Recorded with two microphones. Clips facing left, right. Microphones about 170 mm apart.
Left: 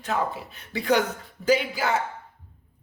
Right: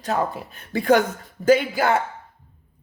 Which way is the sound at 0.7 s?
50° right (ahead or behind).